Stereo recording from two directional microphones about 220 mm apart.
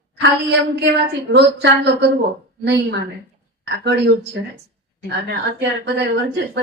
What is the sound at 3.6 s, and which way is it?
A woman's voice, 50° right (ahead or behind).